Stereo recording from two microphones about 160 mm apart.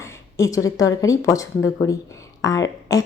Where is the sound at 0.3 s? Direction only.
20° left (ahead or behind).